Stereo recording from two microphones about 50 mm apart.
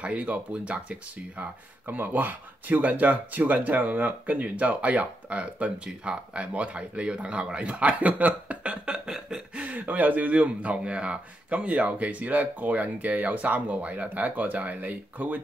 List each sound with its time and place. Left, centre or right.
0.0 s speech: right
9.7 s speech: right